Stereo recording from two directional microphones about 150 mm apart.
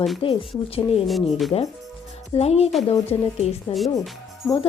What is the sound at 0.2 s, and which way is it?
Speech, 35° left (ahead or behind).